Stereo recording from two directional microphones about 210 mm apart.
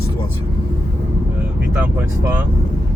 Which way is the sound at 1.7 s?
5° right (ahead or behind).